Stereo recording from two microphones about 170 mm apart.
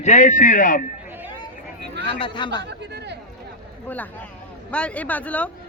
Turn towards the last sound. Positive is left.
turn(degrees=10)  # may be behind; listen again after turning